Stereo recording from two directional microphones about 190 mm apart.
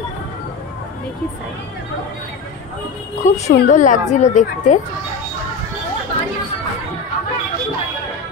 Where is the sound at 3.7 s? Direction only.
40° left (ahead or behind).